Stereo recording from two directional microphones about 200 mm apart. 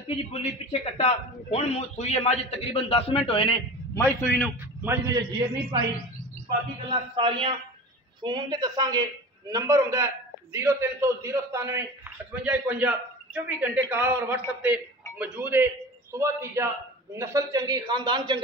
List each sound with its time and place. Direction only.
0.1 s a man's voice: 30° left (ahead or behind)
3.9 s a man's voice: 10° left (ahead or behind)
4.8 s a man's voice: 15° right (ahead or behind)
6.9 s a man's voice: 25° right (ahead or behind)